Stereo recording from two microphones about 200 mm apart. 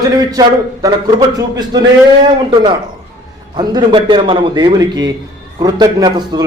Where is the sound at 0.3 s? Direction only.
20° right (ahead or behind).